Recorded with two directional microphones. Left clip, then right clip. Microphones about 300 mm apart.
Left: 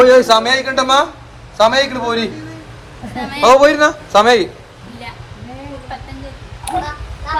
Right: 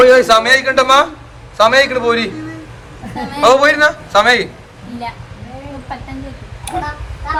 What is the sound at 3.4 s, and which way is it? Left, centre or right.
A man's voice, centre.